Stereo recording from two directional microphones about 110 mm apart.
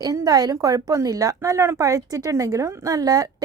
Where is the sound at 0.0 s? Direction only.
35° right (ahead or behind).